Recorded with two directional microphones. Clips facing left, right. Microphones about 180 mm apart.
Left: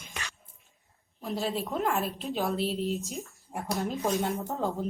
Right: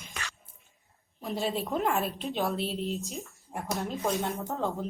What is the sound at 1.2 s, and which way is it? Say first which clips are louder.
A woman's voice: even; centre (ahead or behind).